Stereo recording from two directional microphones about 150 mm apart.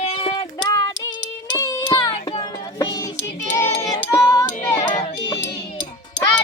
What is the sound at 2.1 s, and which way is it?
Music, 40° left (ahead or behind).